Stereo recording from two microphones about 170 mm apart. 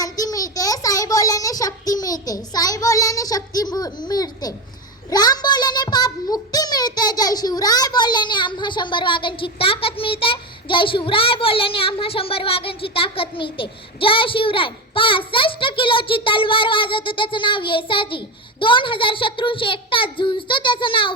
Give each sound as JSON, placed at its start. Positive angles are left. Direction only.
{"t": 0.0, "sound": "child singing", "side_deg": 20}
{"t": 5.1, "sound": "a child's voice", "side_deg": 25}